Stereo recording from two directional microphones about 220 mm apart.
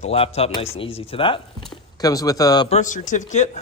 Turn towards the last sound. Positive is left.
turn(degrees=30)  # may be behind; listen again after turning